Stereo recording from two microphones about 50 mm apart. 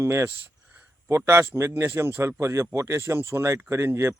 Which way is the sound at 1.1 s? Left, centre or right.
Right.